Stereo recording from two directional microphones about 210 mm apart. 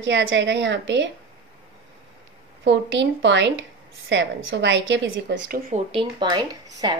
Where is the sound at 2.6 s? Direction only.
60° right (ahead or behind).